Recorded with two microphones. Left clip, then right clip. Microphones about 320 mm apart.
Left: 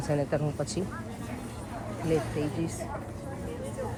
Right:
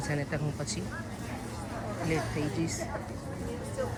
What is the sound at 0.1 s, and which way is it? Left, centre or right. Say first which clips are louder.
Speech: left 9 dB; centre.